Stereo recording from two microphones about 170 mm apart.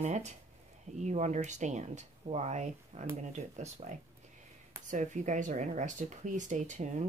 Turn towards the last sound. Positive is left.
turn(degrees=-45)  # may be behind; listen again after turning